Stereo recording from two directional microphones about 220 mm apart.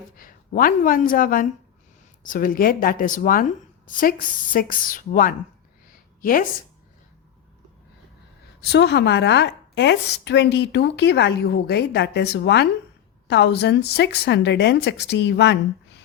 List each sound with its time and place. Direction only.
0.2 s speech: 40° left (ahead or behind)
8.6 s a woman's voice: 50° left (ahead or behind)